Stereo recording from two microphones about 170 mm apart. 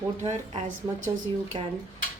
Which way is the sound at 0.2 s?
45° right (ahead or behind).